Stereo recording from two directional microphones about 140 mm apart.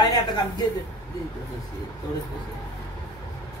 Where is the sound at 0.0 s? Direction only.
30° left (ahead or behind).